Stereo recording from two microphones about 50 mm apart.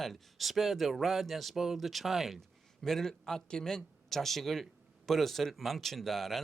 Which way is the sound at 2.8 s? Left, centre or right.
Centre.